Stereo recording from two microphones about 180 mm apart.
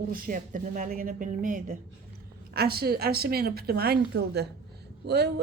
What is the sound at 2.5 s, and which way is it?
A woman's voice, 60° right (ahead or behind).